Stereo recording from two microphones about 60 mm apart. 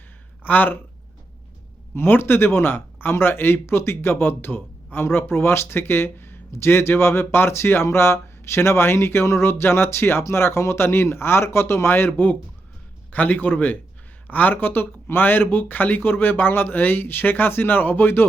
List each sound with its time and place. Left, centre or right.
0.4 s speech: left
2.0 s speech: left